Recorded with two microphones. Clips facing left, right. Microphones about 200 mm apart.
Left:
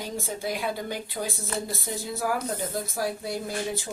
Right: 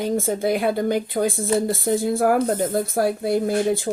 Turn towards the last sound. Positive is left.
turn(degrees=-55)  # may be behind; listen again after turning